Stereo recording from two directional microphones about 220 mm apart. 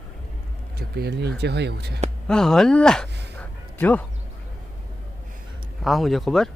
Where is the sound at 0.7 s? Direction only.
45° right (ahead or behind).